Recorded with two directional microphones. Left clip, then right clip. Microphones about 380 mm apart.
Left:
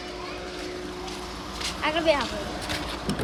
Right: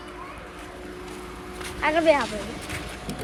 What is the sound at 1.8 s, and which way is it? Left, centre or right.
Speech, centre.